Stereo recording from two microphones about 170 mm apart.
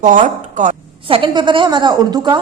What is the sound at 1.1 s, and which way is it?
A woman's voice, 30° right (ahead or behind).